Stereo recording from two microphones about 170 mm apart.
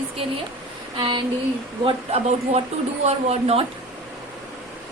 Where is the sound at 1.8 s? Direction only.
40° right (ahead or behind).